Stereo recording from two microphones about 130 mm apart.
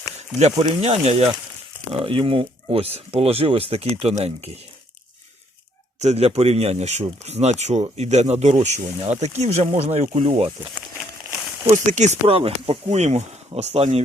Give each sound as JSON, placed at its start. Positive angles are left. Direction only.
{"t": 0.8, "sound": "speech", "side_deg": -55}
{"t": 6.0, "sound": "speech", "side_deg": -55}
{"t": 11.7, "sound": "speech", "side_deg": -70}